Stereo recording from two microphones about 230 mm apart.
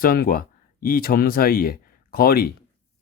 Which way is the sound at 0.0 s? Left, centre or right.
Left.